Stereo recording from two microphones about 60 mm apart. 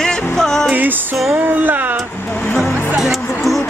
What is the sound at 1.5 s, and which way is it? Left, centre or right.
Music, right.